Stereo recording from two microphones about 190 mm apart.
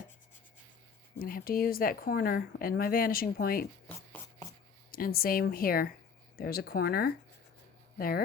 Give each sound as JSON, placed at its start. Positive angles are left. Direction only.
{"t": 1.2, "sound": "a woman's voice", "side_deg": 50}
{"t": 3.8, "sound": "writing", "side_deg": 10}
{"t": 4.9, "sound": "a woman's voice", "side_deg": 50}